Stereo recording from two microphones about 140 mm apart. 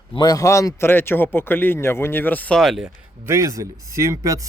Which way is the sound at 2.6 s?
Centre (ahead or behind).